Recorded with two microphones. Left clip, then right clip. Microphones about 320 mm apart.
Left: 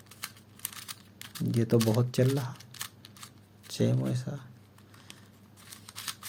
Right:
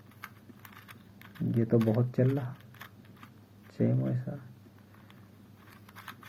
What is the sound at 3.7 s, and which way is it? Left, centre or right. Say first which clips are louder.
Speech: left 1 dB; left.